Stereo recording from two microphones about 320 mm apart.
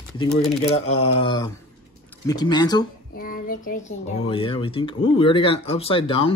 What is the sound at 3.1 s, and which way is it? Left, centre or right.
Speech, left.